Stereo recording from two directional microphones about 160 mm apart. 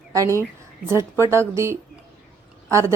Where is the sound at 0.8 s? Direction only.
15° right (ahead or behind).